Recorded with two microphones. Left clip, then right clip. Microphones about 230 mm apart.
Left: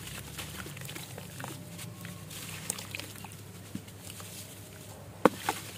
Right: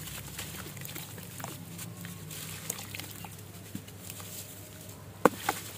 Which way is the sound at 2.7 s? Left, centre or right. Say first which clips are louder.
Left 2 dB; centre.